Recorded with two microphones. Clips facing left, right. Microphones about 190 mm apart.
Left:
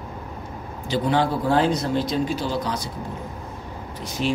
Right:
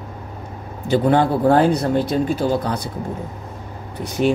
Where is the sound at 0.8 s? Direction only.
55° right (ahead or behind).